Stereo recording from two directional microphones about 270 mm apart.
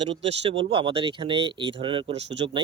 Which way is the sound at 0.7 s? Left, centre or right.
Centre.